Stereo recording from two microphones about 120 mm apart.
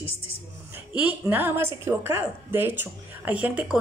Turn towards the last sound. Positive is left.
turn(degrees=-10)  # may be behind; listen again after turning